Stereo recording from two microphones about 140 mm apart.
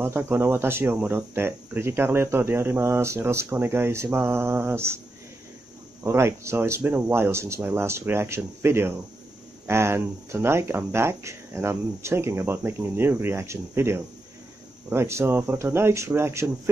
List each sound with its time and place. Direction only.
0.0 s speech: 15° right (ahead or behind)
6.0 s speech: 20° right (ahead or behind)